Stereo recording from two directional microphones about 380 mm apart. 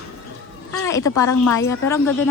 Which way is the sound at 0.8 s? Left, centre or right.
Centre.